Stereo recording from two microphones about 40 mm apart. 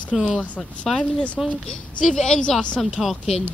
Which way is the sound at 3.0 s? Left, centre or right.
Centre.